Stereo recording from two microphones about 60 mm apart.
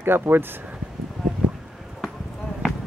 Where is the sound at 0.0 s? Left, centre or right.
Right.